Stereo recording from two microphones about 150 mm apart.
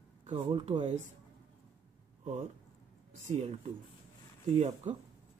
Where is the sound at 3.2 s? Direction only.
50° right (ahead or behind).